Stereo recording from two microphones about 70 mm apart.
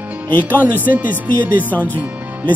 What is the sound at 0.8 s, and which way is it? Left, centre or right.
Speech, right.